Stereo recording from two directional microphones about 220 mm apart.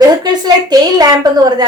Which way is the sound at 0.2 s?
20° right (ahead or behind).